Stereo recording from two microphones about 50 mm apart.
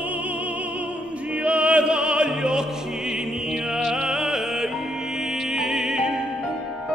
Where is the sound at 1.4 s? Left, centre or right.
Right.